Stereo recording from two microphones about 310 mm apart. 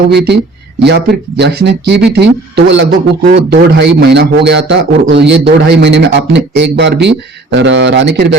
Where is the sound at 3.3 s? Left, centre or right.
Right.